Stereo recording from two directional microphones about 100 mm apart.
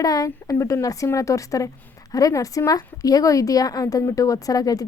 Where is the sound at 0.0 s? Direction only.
40° left (ahead or behind).